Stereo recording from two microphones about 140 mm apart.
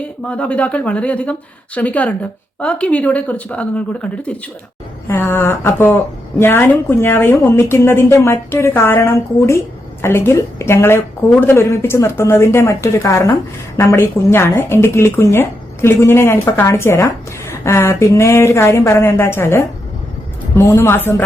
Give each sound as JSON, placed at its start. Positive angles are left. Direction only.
{"t": 0.0, "sound": "a woman's voice", "side_deg": 10}